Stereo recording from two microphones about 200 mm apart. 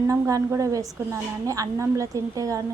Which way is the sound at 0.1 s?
15° right (ahead or behind).